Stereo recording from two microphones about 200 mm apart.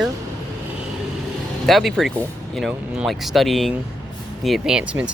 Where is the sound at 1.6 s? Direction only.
Centre (ahead or behind).